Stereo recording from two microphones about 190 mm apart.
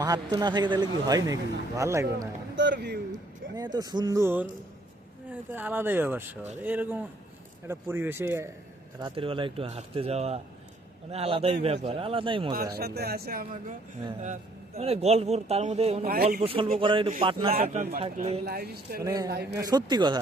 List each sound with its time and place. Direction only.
0.0 s a man's voice: 20° right (ahead or behind)
2.7 s speech: 55° right (ahead or behind)
3.5 s a man's voice: 20° right (ahead or behind)
9.0 s a man's voice: 25° right (ahead or behind)
12.7 s speech: 55° right (ahead or behind)
14.8 s speech: 35° right (ahead or behind)
16.0 s speech: 50° right (ahead or behind)
16.4 s a man's voice: 30° right (ahead or behind)
18.4 s speech: 55° right (ahead or behind)
19.0 s a man's voice: 20° right (ahead or behind)
19.3 s speech: 60° right (ahead or behind)
19.6 s a man's voice: 20° right (ahead or behind)